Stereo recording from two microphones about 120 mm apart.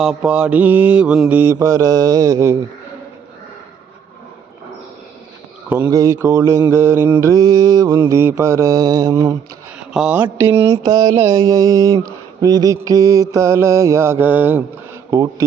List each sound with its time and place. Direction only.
0.0 s mantra: 5° right (ahead or behind)
1.5 s mantra: 30° right (ahead or behind)
5.6 s speech: 15° right (ahead or behind)
5.9 s mantra: 25° right (ahead or behind)
9.9 s mantra: 5° right (ahead or behind)
10.3 s mantra: 20° right (ahead or behind)
10.8 s speech: 30° right (ahead or behind)
11.2 s mantra: 30° right (ahead or behind)
15.1 s mantra: 30° right (ahead or behind)